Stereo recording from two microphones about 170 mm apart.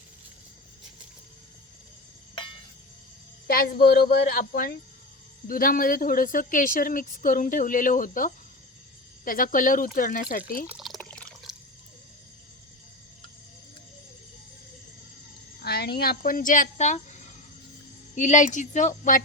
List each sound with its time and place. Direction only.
3.4 s speech: 60° left (ahead or behind)
10.7 s water: centre (ahead or behind)
15.6 s speech: 70° left (ahead or behind); by 19.2 s 50° left (ahead or behind)